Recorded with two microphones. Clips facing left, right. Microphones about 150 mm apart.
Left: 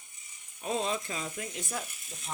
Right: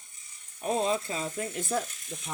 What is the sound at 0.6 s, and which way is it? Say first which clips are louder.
Speech: right 4 dB; 35° right (ahead or behind).